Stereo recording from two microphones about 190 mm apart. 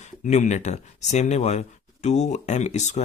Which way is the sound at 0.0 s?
40° left (ahead or behind).